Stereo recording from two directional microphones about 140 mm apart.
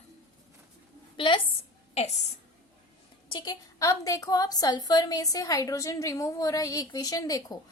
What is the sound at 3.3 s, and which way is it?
A woman's voice, 30° left (ahead or behind).